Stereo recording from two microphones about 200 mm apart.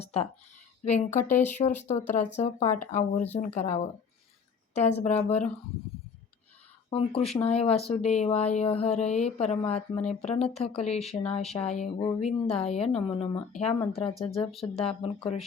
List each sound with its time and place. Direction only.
0.0 s speech: 30° left (ahead or behind)
6.9 s speech: 30° left (ahead or behind)